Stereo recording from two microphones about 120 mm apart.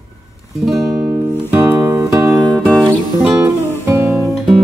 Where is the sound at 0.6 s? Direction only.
Centre (ahead or behind).